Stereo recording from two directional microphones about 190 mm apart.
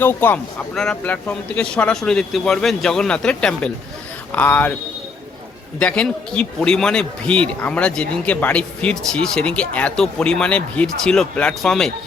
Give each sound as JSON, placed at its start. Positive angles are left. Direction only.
{"t": 0.0, "sound": "a man's voice", "side_deg": 10}
{"t": 5.8, "sound": "a man's voice", "side_deg": 5}